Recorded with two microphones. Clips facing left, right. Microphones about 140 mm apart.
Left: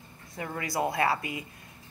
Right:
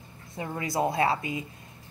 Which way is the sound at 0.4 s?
20° right (ahead or behind).